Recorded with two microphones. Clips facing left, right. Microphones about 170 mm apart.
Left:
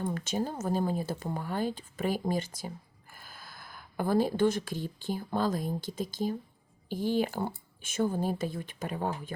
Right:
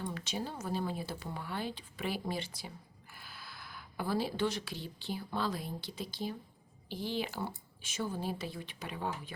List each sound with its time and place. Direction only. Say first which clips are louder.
0.0 s speech: left 7 dB; 45° left (ahead or behind)